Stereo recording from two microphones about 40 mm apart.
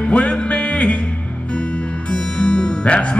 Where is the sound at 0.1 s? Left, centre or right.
Left.